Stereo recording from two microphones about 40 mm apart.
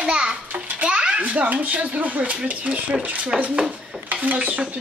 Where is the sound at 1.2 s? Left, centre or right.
Right.